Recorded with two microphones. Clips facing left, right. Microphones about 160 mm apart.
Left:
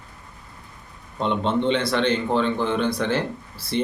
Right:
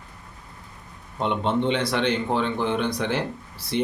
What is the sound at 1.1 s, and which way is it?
A man's voice, 15° right (ahead or behind).